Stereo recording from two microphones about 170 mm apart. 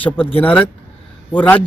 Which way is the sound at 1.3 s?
10° left (ahead or behind).